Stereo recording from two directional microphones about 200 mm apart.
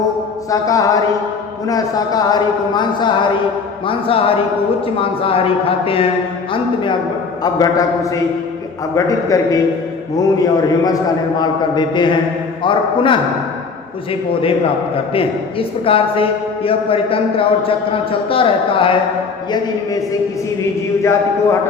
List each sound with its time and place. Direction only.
0.5 s a man's voice: 15° left (ahead or behind)
7.4 s a man's voice: 20° left (ahead or behind)
15.1 s a man's voice: 25° left (ahead or behind)